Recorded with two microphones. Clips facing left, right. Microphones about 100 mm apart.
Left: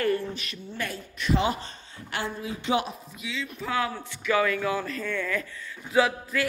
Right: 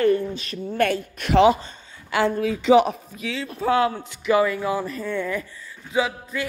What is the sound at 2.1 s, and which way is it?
Speech, 85° right.